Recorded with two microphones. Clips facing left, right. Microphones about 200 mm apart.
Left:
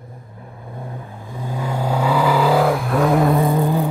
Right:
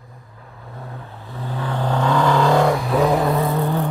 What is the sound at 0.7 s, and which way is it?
Vehicle, 15° left (ahead or behind).